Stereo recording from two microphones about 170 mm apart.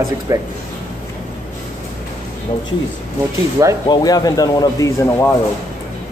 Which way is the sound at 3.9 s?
20° left (ahead or behind).